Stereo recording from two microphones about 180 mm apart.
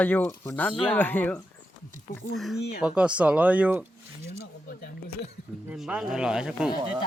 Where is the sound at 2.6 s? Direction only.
65° left (ahead or behind).